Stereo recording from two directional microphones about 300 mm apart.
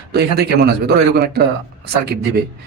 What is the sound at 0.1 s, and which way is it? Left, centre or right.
Speech, right.